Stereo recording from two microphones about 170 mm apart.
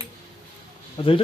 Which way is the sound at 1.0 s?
35° left (ahead or behind).